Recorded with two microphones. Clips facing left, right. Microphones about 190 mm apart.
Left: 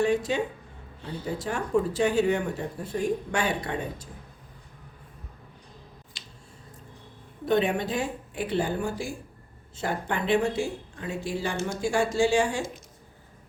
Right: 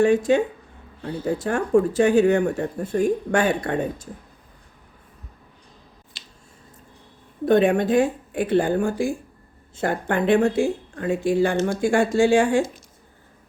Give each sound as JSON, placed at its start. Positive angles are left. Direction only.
{"t": 0.0, "sound": "speech", "side_deg": -50}
{"t": 7.4, "sound": "speech", "side_deg": -50}